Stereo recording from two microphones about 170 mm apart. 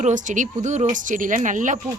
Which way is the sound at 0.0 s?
50° right (ahead or behind).